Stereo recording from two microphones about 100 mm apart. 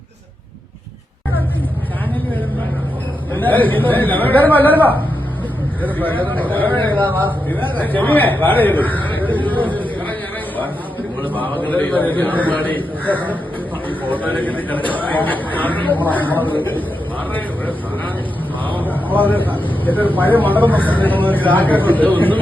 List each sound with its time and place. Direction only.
3.3 s a man's voice: 20° left (ahead or behind)
11.2 s a man's voice: 15° left (ahead or behind)
18.9 s a sound: 15° left (ahead or behind)
19.8 s a man's voice: 15° left (ahead or behind)